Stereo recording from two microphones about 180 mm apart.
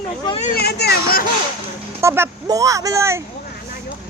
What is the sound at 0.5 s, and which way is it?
Speech, 60° left (ahead or behind).